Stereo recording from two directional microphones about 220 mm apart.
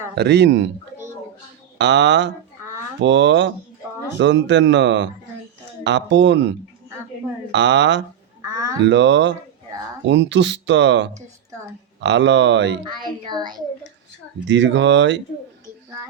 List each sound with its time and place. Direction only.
0.2 s speech: 50° right (ahead or behind)
1.8 s speech: 55° right (ahead or behind)
12.8 s a child's voice: 20° right (ahead or behind)
14.4 s speech: 55° right (ahead or behind)